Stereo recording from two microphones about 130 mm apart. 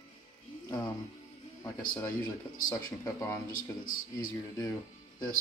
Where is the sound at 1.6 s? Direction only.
20° left (ahead or behind).